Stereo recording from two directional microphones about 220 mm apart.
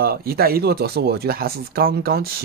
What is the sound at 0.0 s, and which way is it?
Speech, 45° right (ahead or behind).